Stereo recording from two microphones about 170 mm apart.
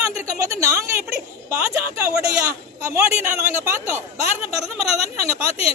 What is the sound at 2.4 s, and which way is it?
Speech, 15° right (ahead or behind).